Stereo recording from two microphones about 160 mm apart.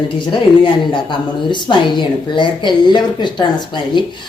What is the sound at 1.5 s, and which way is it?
A woman's voice, 30° left (ahead or behind).